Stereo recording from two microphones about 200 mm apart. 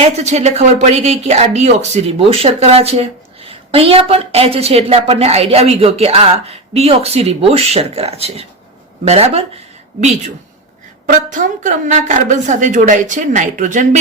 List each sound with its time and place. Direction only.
0.0 s speech: 35° right (ahead or behind)
11.0 s speech: 40° right (ahead or behind)